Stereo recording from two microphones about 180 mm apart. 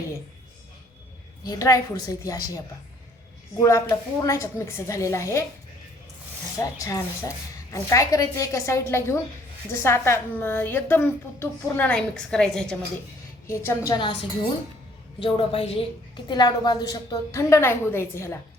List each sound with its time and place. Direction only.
1.5 s a woman's voice: 20° left (ahead or behind)
6.6 s a woman's voice: 20° left (ahead or behind)
13.5 s a woman's voice: 20° left (ahead or behind)